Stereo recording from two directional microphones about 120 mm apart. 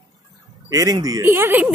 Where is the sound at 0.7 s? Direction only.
30° right (ahead or behind).